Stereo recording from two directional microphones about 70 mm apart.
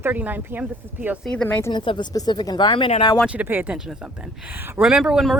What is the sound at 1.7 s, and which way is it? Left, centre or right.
Speech, left.